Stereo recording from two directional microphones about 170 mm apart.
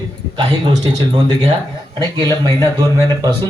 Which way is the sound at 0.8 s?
25° right (ahead or behind).